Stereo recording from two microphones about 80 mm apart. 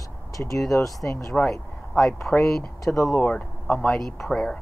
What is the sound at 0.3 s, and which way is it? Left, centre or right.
Speech, left.